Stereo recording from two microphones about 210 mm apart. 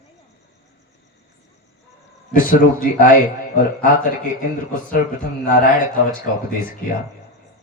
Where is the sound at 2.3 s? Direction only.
40° left (ahead or behind).